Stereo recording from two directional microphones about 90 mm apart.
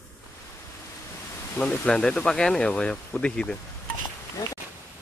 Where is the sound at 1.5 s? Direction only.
10° left (ahead or behind).